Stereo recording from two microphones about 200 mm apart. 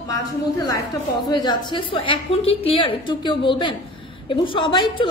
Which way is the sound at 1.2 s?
20° left (ahead or behind).